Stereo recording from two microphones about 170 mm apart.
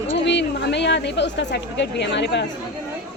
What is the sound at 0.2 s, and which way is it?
A woman's voice, 90° left.